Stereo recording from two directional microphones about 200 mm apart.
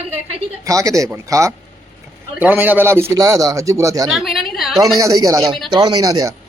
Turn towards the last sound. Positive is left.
turn(degrees=-20)  # may be behind; listen again after turning